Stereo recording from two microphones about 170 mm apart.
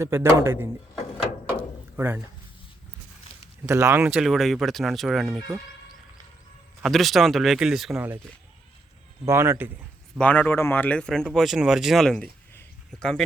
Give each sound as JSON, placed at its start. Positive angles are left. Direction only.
{"t": 0.0, "sound": "speech", "side_deg": -15}
{"t": 1.2, "sound": "door", "side_deg": -10}
{"t": 3.7, "sound": "speech", "side_deg": -15}
{"t": 4.0, "sound": "speech", "side_deg": -5}
{"t": 6.8, "sound": "speech", "side_deg": 0}
{"t": 9.2, "sound": "speech", "side_deg": -15}
{"t": 10.2, "sound": "speech", "side_deg": 10}